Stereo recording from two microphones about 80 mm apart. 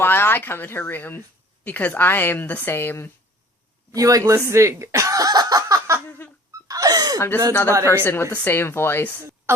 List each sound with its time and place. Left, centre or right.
0.0 s speech: left
3.9 s speech: right
6.1 s a sound: left
6.7 s gasp: right
7.2 s speech: left